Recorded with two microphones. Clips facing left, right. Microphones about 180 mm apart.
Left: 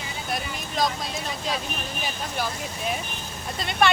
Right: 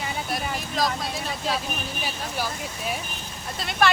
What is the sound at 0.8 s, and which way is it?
Speech, centre (ahead or behind).